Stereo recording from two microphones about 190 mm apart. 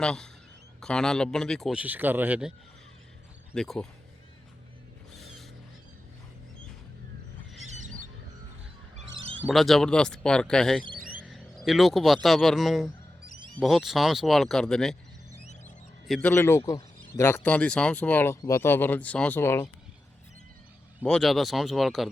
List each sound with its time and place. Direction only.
0.0 s speech: 5° left (ahead or behind)
3.5 s speech: 5° left (ahead or behind)
5.2 s mechanisms: centre (ahead or behind)
7.7 s a sound: 40° right (ahead or behind)
9.4 s speech: centre (ahead or behind)
16.0 s speech: centre (ahead or behind)
16.3 s speech: 10° left (ahead or behind)
21.0 s speech: 5° left (ahead or behind)